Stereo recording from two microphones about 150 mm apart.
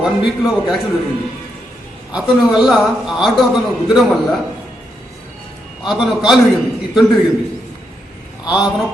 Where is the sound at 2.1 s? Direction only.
5° right (ahead or behind).